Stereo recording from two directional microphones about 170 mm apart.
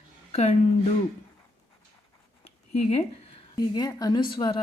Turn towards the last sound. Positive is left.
turn(degrees=30)  # may be behind; listen again after turning